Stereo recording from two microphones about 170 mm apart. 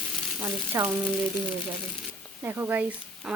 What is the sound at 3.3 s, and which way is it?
Speech, 5° right (ahead or behind).